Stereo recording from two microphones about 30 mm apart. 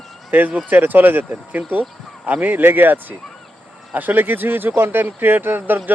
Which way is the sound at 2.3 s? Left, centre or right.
Right.